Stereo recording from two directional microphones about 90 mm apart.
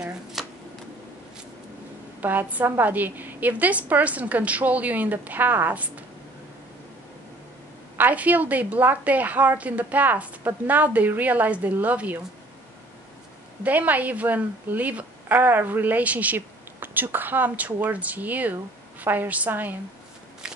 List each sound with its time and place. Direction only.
0.0 s shuffling cards: 5° right (ahead or behind)
2.1 s a woman's voice: 20° right (ahead or behind)
8.0 s a woman's voice: 20° right (ahead or behind)
13.7 s a woman's voice: 20° right (ahead or behind)
20.4 s walk: 5° right (ahead or behind)